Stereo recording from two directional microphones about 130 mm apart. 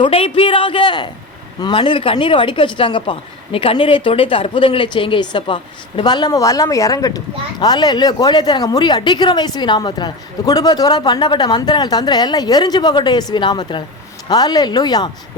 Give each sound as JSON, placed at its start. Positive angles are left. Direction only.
{"t": 0.0, "sound": "speech", "side_deg": 45}